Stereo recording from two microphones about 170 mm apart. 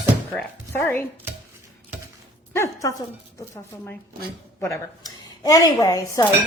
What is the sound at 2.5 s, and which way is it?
Speech, 15° left (ahead or behind).